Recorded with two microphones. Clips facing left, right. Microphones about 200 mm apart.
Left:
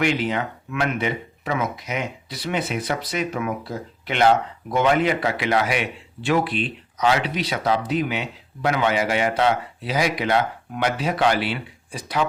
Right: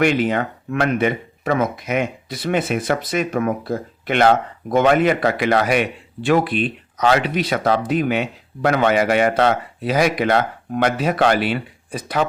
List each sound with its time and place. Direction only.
0.0 s speech: 55° right (ahead or behind)